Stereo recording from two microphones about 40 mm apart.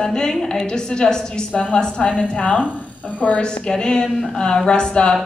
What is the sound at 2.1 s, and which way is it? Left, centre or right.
Speech, left.